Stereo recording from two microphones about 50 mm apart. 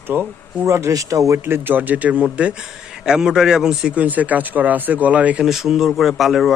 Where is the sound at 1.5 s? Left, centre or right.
Right; by 3.9 s centre.